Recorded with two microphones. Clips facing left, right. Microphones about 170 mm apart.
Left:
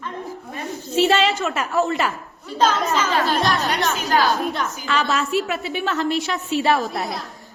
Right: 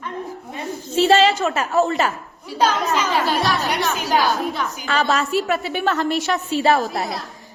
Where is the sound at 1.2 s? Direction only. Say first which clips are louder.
Right 3 dB; centre (ahead or behind).